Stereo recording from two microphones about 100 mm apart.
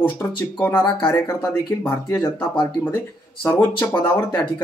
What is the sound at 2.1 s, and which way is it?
Speech, 50° left (ahead or behind).